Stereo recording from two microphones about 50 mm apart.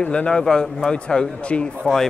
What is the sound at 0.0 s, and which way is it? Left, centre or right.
A man's voice, left.